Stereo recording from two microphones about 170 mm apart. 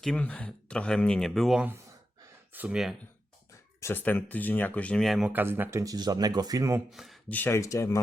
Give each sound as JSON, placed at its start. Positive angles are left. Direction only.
{"t": 0.0, "sound": "speech", "side_deg": 5}
{"t": 3.8, "sound": "speech", "side_deg": 15}
{"t": 6.9, "sound": "speech", "side_deg": 0}
{"t": 7.3, "sound": "speech", "side_deg": 10}